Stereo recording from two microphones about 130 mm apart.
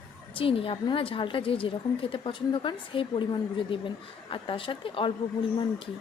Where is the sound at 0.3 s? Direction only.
45° left (ahead or behind).